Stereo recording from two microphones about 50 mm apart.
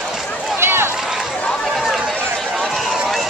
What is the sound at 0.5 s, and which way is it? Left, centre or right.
Run, right.